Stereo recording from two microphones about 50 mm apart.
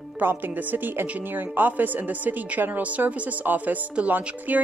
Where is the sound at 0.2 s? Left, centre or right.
Right.